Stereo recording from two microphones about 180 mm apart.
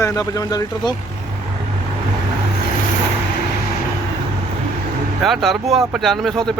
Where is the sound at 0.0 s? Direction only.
20° left (ahead or behind).